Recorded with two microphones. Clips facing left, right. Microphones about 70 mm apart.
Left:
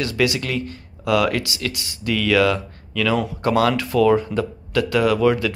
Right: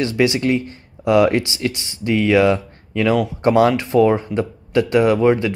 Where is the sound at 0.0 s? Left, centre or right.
Right.